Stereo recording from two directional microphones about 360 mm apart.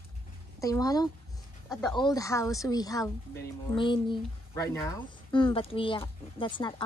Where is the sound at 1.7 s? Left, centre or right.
Centre.